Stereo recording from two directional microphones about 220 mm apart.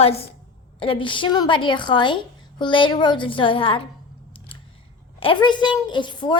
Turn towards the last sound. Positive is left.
turn(degrees=20)  # may be behind; listen again after turning